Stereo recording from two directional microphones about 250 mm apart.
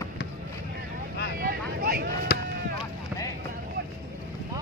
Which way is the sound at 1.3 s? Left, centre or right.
Right.